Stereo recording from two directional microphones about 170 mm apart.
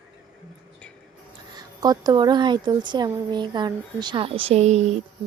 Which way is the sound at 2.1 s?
25° right (ahead or behind).